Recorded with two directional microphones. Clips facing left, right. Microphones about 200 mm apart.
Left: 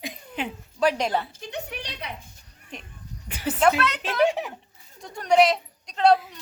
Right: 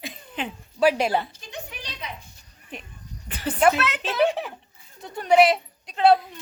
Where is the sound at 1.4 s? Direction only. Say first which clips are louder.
Left 4 dB; 65° left (ahead or behind).